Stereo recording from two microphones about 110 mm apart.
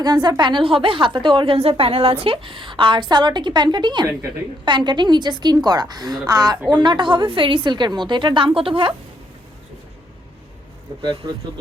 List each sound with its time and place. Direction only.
0.0 s a woman's voice: 40° right (ahead or behind)